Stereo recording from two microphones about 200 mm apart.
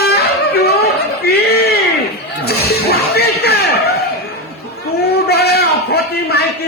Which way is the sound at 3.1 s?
50° left (ahead or behind).